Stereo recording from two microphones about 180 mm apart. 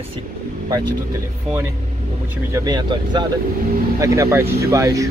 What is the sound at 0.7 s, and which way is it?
Speech, 20° right (ahead or behind).